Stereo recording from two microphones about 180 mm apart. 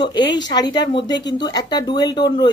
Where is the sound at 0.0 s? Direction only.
25° left (ahead or behind).